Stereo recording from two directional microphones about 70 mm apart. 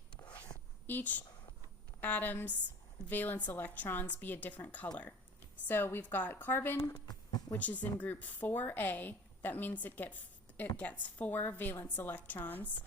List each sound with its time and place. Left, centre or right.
0.2 s a sound: left
0.9 s speech: left
7.5 s speech: left